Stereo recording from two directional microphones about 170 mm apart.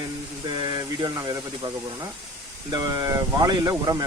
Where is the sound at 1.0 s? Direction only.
25° right (ahead or behind).